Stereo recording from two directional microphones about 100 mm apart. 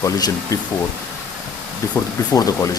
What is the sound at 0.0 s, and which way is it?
Speech, 35° left (ahead or behind).